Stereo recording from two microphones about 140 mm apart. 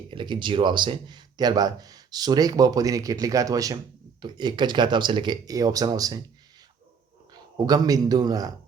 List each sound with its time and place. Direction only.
0.1 s speech: 35° right (ahead or behind)
7.5 s speech: 30° right (ahead or behind)